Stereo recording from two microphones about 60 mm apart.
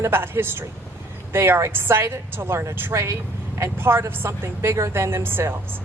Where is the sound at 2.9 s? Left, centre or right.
Right.